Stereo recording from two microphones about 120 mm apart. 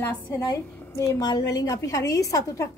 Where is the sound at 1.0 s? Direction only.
30° left (ahead or behind).